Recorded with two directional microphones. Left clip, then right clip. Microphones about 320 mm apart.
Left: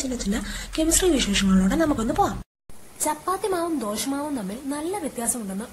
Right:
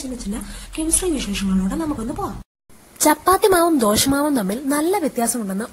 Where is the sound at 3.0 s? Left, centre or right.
Right.